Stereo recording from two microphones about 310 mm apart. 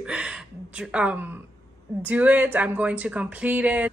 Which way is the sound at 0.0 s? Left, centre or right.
Centre.